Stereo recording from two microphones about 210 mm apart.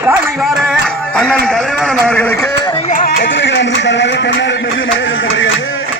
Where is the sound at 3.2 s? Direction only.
60° left (ahead or behind).